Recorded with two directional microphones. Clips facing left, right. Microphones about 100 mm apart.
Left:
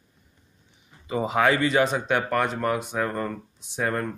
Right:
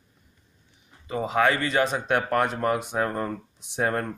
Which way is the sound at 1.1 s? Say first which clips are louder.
Left 1 dB; 10° left (ahead or behind).